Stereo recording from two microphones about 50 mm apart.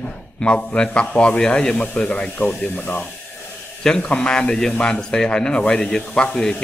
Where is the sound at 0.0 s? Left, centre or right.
Left.